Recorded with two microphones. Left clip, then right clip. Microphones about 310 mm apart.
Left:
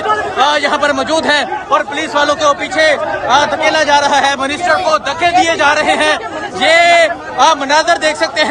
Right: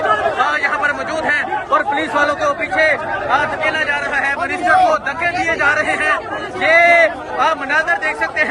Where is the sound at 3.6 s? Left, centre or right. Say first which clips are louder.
Left 7 dB; left.